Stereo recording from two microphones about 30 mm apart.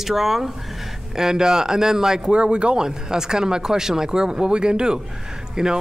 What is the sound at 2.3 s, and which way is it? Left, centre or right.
Speech, right.